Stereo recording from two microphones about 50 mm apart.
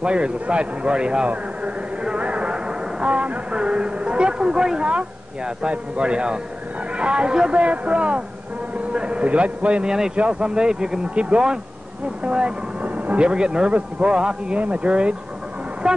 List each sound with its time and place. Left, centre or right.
0.0 s a man's voice: centre
2.0 s a sound: right
5.6 s a man's voice: right